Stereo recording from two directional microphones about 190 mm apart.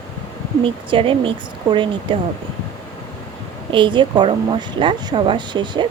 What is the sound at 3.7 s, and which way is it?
Speech, 25° right (ahead or behind).